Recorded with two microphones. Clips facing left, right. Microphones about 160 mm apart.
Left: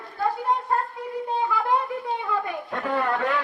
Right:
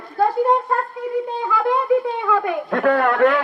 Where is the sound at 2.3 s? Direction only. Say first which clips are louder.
Right 8 dB; 90° right; by 3.4 s 70° right (ahead or behind).